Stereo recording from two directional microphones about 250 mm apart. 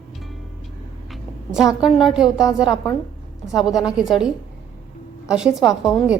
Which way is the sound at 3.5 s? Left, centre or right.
Centre.